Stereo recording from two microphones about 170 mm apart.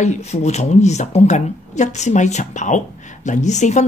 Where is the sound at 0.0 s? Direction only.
40° left (ahead or behind).